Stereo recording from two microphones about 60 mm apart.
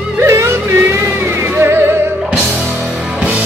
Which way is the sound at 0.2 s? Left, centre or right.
Right.